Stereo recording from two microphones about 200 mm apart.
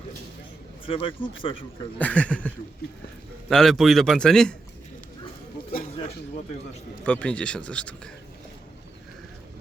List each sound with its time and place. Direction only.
0.9 s speech: 25° left (ahead or behind)
2.0 s speech: 5° left (ahead or behind)
3.5 s speech: centre (ahead or behind)
5.7 s a sound: 35° left (ahead or behind)
7.0 s speech: 5° left (ahead or behind)